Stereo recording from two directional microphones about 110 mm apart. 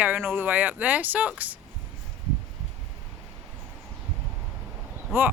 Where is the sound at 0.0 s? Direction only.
15° right (ahead or behind).